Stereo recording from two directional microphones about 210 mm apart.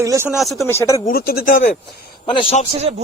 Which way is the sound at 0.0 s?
15° right (ahead or behind).